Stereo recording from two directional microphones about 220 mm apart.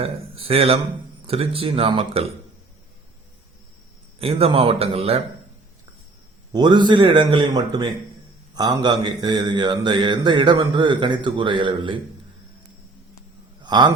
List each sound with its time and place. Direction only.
0.0 s mantra: 25° right (ahead or behind)
4.2 s mantra: 25° right (ahead or behind)
6.5 s mantra: 20° right (ahead or behind)
13.6 s a sound: 20° right (ahead or behind)